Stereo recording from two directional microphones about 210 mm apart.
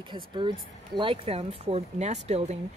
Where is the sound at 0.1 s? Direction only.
20° right (ahead or behind).